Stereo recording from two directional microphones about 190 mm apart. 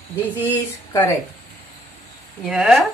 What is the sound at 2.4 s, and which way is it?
Speech, centre (ahead or behind).